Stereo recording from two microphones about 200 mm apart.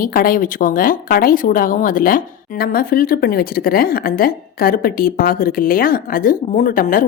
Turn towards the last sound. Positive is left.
turn(degrees=45)  # may be behind; listen again after turning